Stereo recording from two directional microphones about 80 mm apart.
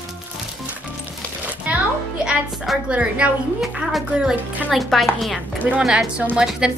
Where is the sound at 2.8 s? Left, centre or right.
Centre.